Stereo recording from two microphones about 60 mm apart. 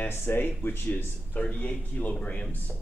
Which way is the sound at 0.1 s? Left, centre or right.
Left.